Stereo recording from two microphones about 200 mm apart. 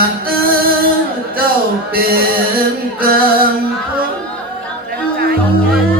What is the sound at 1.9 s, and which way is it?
Music, 50° right (ahead or behind).